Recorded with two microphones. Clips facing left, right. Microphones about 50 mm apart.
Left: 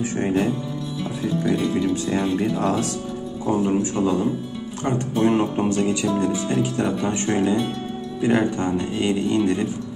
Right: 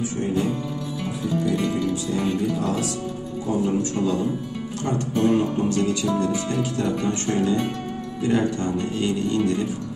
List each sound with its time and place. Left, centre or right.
0.2 s speech: left
2.0 s speech: left
4.8 s speech: left